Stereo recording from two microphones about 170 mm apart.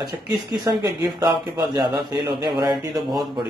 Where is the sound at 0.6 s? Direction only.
25° right (ahead or behind).